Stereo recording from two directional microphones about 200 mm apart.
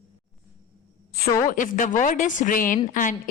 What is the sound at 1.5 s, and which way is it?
A woman's voice, 40° left (ahead or behind).